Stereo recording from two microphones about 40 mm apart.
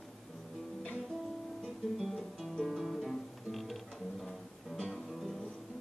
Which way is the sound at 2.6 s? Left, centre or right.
Centre.